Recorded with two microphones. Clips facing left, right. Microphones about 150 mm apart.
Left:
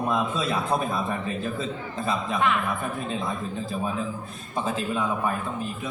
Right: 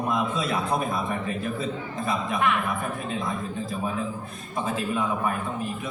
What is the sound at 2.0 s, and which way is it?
Speech, 30° left (ahead or behind).